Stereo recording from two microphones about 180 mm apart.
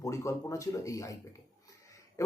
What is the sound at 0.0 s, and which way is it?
Speech, 15° left (ahead or behind).